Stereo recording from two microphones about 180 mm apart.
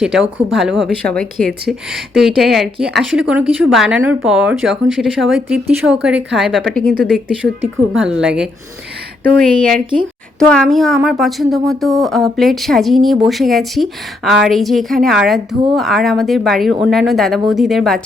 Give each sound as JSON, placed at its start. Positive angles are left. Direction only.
{"t": 0.0, "sound": "speech", "side_deg": -5}